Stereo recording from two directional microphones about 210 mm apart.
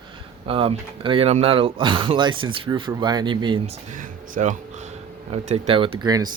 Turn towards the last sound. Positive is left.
turn(degrees=-20)  # may be behind; listen again after turning